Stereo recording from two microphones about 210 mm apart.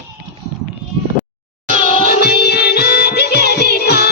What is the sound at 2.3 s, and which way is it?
Music, 50° left (ahead or behind).